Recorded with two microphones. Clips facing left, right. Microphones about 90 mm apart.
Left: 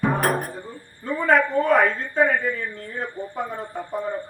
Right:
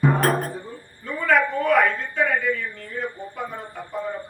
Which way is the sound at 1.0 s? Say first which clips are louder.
Left 1 dB; 35° left (ahead or behind).